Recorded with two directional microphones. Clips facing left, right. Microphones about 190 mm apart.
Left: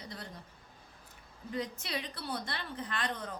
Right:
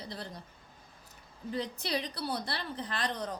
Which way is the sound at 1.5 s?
35° right (ahead or behind).